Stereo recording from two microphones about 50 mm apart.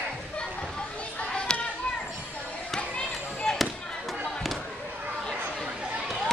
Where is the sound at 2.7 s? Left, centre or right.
Centre.